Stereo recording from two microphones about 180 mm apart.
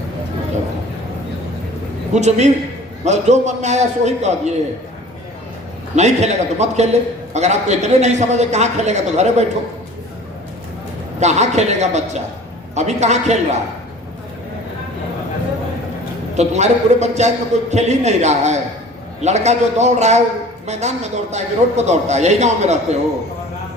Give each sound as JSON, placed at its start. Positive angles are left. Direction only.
{"t": 2.1, "sound": "a man's voice", "side_deg": -40}
{"t": 6.0, "sound": "a man's voice", "side_deg": -40}
{"t": 11.2, "sound": "a man's voice", "side_deg": -40}
{"t": 16.3, "sound": "a man's voice", "side_deg": -40}